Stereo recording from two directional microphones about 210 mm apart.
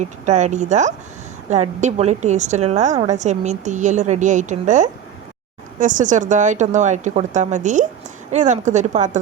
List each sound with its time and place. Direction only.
0.0 s a woman's voice: 35° right (ahead or behind)